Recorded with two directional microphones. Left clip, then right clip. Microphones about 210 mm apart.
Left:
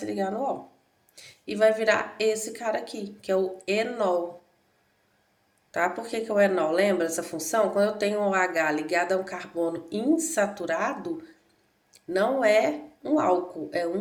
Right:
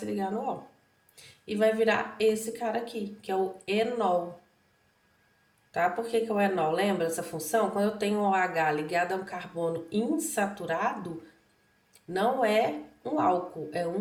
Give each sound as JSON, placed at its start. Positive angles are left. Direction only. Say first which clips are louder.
{"t": 0.0, "sound": "speech", "louder": "left 3 dB", "side_deg": 35}
{"t": 5.7, "sound": "speech", "louder": "even", "side_deg": 35}